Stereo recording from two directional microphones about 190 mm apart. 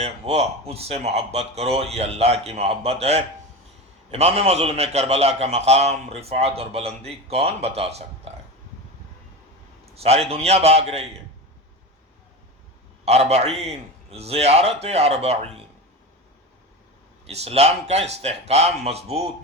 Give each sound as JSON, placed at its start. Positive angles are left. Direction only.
{"t": 0.0, "sound": "a man's voice", "side_deg": -35}
{"t": 9.9, "sound": "a man's voice", "side_deg": -30}
{"t": 13.1, "sound": "a man's voice", "side_deg": -35}
{"t": 17.2, "sound": "a man's voice", "side_deg": -35}